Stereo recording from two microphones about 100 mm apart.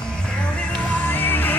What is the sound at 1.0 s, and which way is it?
Music, 20° left (ahead or behind).